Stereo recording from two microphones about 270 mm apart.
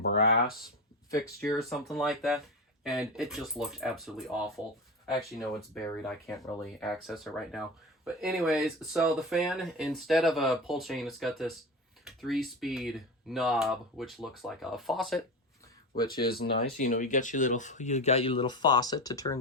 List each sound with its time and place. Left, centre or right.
0.0 s speech: left
1.1 s speech: centre
1.5 s speech: centre
16.2 s speech: left; by 19.4 s centre